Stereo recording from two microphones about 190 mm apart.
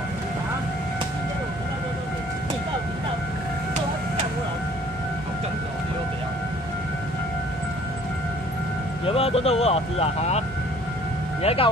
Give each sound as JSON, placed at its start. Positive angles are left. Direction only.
{"t": 9.0, "sound": "speech", "side_deg": 30}
{"t": 11.4, "sound": "speech", "side_deg": 30}